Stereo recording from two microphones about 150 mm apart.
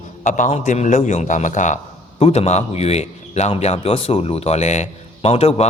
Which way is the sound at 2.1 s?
45° left (ahead or behind).